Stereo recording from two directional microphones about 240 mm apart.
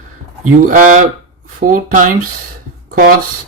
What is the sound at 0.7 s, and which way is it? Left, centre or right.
Speech, right.